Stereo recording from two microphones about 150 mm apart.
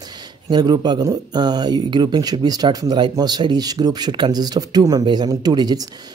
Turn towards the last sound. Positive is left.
turn(degrees=-25)  # may be behind; listen again after turning